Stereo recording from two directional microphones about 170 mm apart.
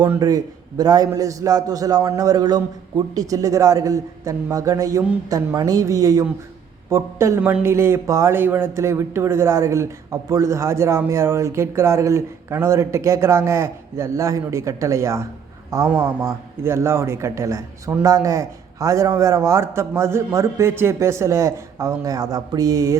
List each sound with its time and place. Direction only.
0.1 s a man's voice: 20° right (ahead or behind)